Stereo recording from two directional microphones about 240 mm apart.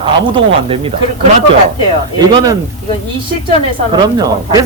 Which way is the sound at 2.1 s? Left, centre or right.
Centre.